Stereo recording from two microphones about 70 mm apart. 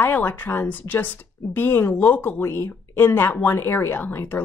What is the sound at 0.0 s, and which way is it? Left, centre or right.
Speech, left.